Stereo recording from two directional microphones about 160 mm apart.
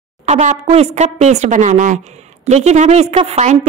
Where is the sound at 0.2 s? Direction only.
45° right (ahead or behind).